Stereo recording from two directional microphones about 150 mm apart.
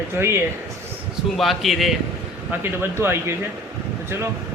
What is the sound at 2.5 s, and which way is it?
Speech, 15° right (ahead or behind).